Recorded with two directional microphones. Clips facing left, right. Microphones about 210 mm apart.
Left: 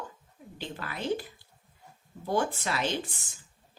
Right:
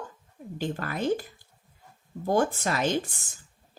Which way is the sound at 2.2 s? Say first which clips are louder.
Right 4 dB; 45° right (ahead or behind).